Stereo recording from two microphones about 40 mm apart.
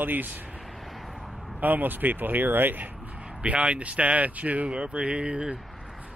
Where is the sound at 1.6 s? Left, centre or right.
Right.